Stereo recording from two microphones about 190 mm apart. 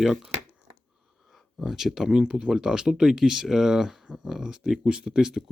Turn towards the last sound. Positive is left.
turn(degrees=0)  # may be behind; listen again after turning